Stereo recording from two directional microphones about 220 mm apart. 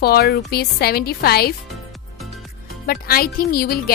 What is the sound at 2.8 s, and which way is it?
Speech, 45° left (ahead or behind).